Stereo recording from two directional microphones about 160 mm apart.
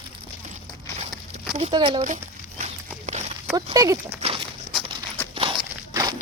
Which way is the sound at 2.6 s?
45° right (ahead or behind).